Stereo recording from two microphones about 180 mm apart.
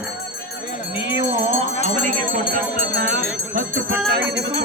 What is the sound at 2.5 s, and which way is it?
Speech, 55° right (ahead or behind).